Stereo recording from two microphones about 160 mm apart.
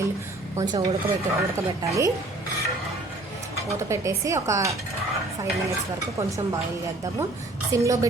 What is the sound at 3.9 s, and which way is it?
Speech, 20° right (ahead or behind).